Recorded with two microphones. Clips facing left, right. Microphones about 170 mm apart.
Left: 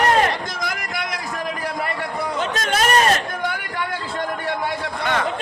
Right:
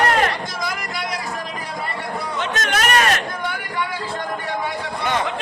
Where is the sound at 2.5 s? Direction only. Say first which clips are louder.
Left 1 dB; 30° left (ahead or behind).